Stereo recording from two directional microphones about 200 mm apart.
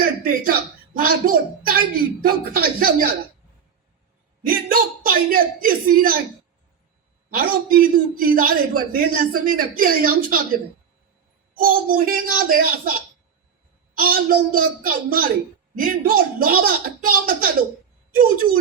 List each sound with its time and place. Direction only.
0.0 s a sound: 45° right (ahead or behind)
0.9 s a man's voice: 45° right (ahead or behind)
4.4 s a man's voice: 45° right (ahead or behind)
7.3 s a man's voice: 45° right (ahead or behind)
11.5 s a man's voice: 45° right (ahead or behind)
14.0 s a man's voice: 45° right (ahead or behind)